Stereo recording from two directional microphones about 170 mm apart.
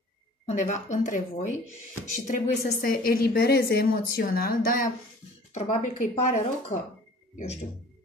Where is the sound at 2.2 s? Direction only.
50° left (ahead or behind).